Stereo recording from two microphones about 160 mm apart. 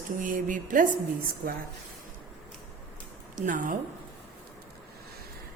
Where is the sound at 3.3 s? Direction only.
55° right (ahead or behind).